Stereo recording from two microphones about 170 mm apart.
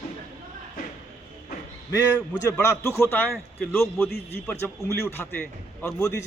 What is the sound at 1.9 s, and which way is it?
A man's voice, 20° left (ahead or behind).